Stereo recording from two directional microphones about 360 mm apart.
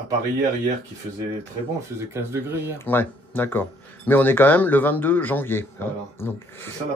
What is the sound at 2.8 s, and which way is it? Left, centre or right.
Speech, centre.